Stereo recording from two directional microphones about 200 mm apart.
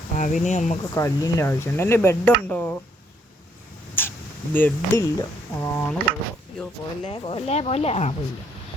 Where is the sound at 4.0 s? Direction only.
10° left (ahead or behind).